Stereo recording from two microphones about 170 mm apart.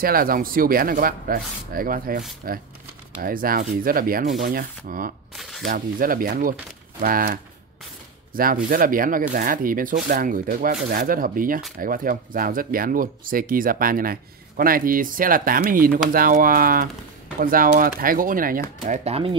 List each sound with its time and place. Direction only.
0.0 s speech: 60° right (ahead or behind)
5.3 s a sound: centre (ahead or behind)
5.7 s speech: 55° right (ahead or behind)
18.9 s speech: 35° right (ahead or behind)